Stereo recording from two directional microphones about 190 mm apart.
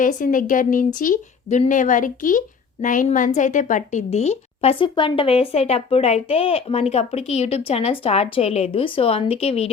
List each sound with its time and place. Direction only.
0.0 s a woman's voice: 45° left (ahead or behind)